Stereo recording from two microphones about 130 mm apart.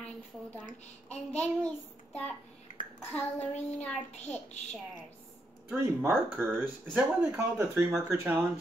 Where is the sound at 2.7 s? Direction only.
80° left.